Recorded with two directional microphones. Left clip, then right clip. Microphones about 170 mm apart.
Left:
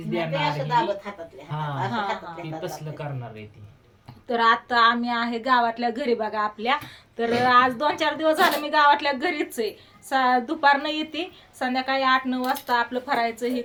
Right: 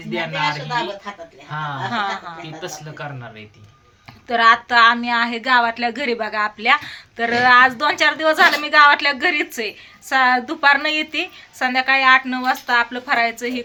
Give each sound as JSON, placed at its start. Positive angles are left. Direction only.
{"t": 1.5, "sound": "a woman's voice", "side_deg": -10}